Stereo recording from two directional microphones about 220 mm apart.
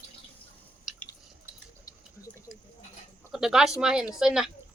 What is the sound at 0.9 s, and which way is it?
Drip, centre (ahead or behind).